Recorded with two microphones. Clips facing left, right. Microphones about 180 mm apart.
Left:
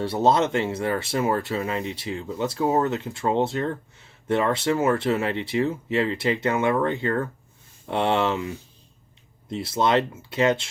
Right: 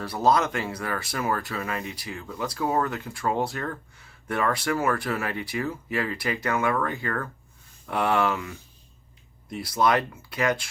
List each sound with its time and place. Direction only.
0.0 s speech: 25° left (ahead or behind)